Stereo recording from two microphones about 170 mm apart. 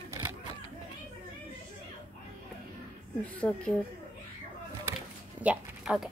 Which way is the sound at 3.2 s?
10° left (ahead or behind).